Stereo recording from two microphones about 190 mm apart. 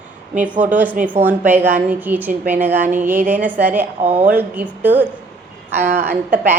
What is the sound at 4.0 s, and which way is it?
Speech, 35° right (ahead or behind).